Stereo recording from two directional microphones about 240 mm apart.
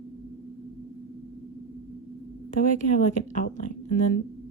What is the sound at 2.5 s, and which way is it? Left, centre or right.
Speech, left.